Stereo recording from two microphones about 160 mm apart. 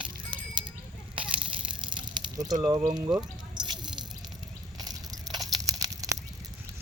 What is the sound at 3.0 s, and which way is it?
Speech, 25° right (ahead or behind).